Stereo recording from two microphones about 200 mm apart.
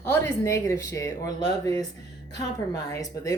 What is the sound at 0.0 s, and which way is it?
A woman's voice, 10° left (ahead or behind).